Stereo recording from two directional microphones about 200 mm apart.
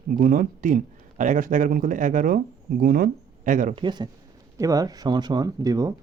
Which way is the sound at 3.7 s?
20° right (ahead or behind).